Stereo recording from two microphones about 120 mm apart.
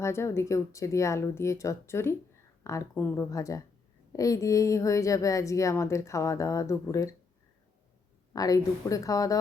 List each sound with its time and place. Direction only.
0.0 s a woman's voice: 20° left (ahead or behind)
8.3 s a woman's voice: 30° left (ahead or behind)